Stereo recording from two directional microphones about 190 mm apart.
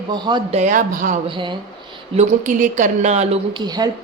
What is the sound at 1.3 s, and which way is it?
Speech, 25° right (ahead or behind).